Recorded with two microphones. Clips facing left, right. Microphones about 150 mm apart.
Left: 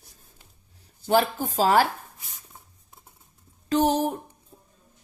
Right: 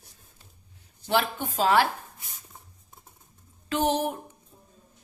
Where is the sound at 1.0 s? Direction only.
40° left (ahead or behind).